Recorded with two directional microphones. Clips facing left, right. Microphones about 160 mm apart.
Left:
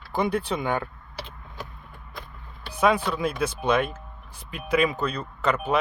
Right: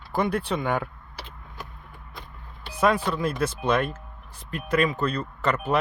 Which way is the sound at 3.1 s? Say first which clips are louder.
Even; centre (ahead or behind).